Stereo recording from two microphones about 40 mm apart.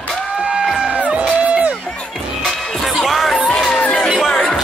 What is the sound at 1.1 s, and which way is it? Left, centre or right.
Music, right.